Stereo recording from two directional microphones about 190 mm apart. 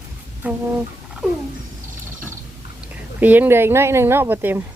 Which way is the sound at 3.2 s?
10° right (ahead or behind).